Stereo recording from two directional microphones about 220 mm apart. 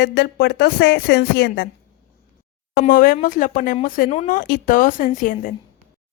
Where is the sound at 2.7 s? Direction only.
40° left (ahead or behind).